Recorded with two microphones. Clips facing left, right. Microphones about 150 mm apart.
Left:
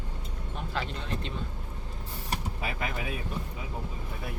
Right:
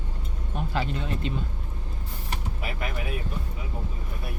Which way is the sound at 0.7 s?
5° right (ahead or behind).